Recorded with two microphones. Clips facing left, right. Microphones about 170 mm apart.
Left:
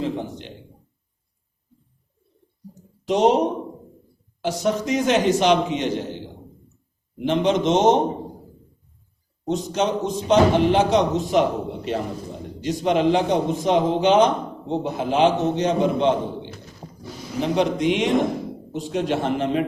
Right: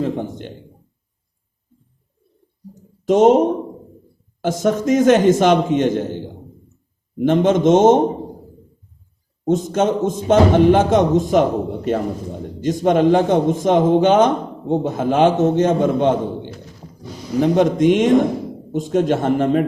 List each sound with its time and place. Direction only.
0.0 s a sound: 50° right (ahead or behind)
3.1 s a man's voice: 45° right (ahead or behind)
9.4 s a man's voice: 45° right (ahead or behind)